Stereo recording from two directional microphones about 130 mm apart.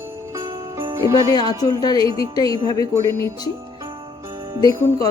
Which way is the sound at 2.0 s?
45° right (ahead or behind).